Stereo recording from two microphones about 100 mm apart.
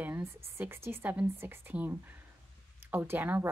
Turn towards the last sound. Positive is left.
turn(degrees=-20)  # may be behind; listen again after turning